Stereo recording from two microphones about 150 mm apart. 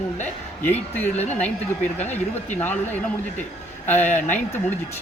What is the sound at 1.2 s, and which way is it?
Speech, 50° left (ahead or behind).